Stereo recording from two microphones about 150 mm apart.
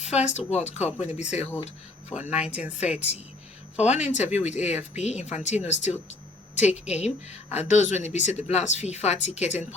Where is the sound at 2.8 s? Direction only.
45° left (ahead or behind).